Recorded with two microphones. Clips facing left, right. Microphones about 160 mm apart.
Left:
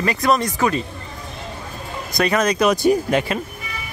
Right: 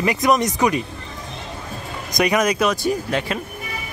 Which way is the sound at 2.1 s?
15° right (ahead or behind).